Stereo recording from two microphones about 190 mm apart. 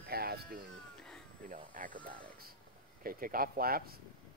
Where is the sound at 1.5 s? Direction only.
45° right (ahead or behind).